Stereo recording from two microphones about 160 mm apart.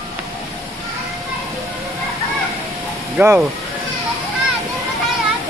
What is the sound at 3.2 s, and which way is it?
Speech, 10° right (ahead or behind).